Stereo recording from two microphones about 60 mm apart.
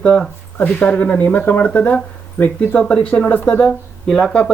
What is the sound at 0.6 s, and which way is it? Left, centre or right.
Speech, left.